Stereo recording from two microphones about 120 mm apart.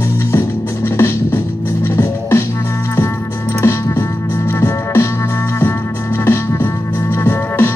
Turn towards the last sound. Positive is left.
turn(degrees=20)  # may be behind; listen again after turning